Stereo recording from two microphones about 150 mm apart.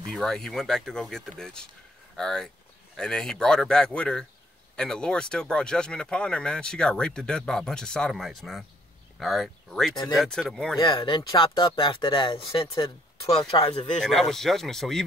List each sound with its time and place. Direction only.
0.0 s speech: centre (ahead or behind)
10.8 s speech: 35° left (ahead or behind)
14.0 s speech: centre (ahead or behind)